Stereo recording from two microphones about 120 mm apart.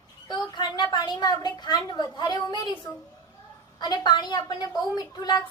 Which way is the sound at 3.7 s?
35° left (ahead or behind).